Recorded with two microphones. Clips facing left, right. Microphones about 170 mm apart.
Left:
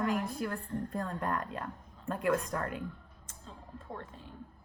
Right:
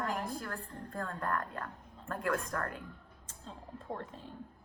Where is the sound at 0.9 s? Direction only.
20° left (ahead or behind).